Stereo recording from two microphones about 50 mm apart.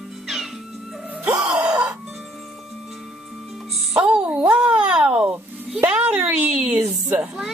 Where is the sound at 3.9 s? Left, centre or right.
Centre.